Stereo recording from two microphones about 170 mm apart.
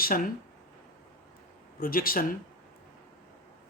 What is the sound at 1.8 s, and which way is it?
Speech, 55° left (ahead or behind).